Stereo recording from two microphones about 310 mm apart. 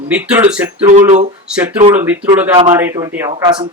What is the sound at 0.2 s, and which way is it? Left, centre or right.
Speech, centre.